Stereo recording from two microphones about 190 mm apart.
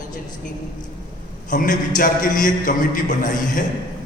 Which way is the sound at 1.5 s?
45° left (ahead or behind).